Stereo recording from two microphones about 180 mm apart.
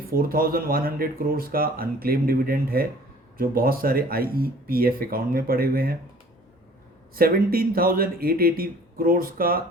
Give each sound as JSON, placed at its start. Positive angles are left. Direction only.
{"t": 0.1, "sound": "speech", "side_deg": -55}
{"t": 7.2, "sound": "speech", "side_deg": -55}